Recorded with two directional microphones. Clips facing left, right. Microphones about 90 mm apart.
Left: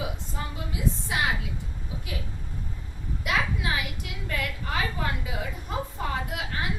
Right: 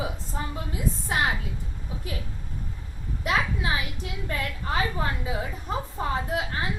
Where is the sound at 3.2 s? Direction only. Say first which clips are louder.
Right 2 dB; 35° right (ahead or behind).